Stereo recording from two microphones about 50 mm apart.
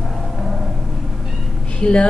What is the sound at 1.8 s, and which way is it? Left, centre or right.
Speech, left.